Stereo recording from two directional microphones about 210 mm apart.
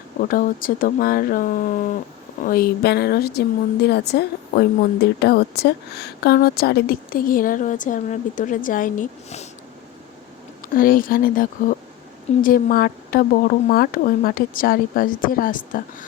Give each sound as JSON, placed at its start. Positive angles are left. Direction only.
{"t": 0.2, "sound": "a woman's voice", "side_deg": 40}
{"t": 10.8, "sound": "a woman's voice", "side_deg": 40}